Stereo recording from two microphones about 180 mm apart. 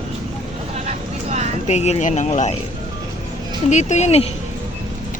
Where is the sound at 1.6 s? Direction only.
40° left (ahead or behind).